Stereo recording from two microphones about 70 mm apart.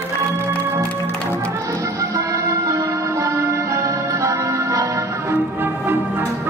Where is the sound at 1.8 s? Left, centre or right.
Right.